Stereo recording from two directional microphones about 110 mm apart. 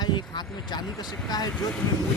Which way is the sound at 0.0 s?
40° left (ahead or behind).